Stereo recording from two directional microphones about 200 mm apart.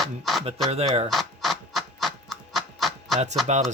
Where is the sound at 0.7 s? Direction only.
30° right (ahead or behind).